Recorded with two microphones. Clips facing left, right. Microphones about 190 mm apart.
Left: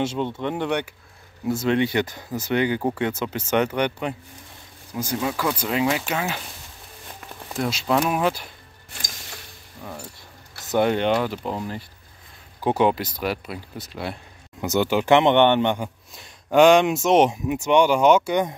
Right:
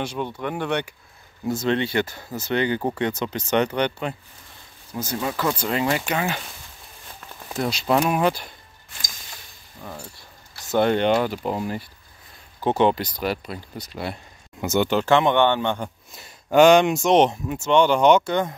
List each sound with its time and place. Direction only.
0.0 s speech: 25° left (ahead or behind); by 6.4 s centre (ahead or behind)
7.5 s speech: centre (ahead or behind)
10.6 s a sound: 20° left (ahead or behind)
10.9 s speech: centre (ahead or behind)
12.6 s speech: 5° left (ahead or behind)
16.2 s speech: centre (ahead or behind)